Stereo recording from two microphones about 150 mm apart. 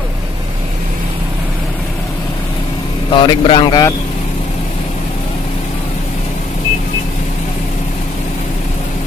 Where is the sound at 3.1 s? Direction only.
30° left (ahead or behind).